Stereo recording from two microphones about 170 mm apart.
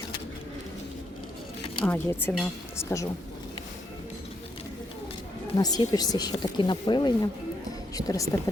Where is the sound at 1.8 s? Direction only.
10° left (ahead or behind).